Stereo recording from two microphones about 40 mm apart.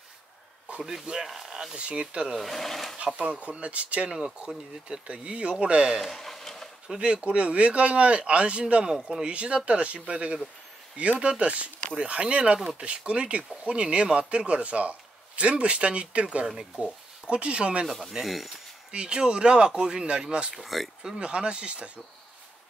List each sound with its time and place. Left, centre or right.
0.7 s a sound: right
1.2 s speech: centre
1.8 s speech: right
2.3 s speech: centre
3.2 s speech: right
5.9 s a sound: centre
7.0 s speech: right
16.4 s speech: centre
16.8 s speech: right
17.8 s speech: centre
18.9 s speech: right
20.5 s speech: centre
21.2 s speech: right